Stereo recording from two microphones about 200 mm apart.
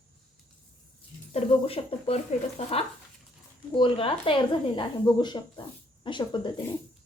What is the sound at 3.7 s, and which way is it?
Speech, 25° left (ahead or behind).